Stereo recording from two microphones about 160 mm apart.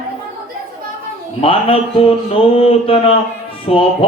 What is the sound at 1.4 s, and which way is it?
Speech, 35° left (ahead or behind).